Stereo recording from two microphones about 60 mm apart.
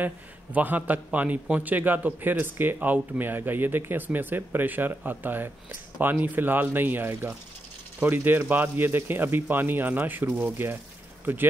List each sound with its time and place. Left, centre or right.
0.0 s a man's voice: right